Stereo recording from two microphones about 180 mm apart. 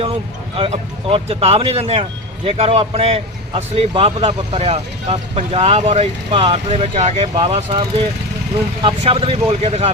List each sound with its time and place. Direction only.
0.0 s speech: 30° right (ahead or behind)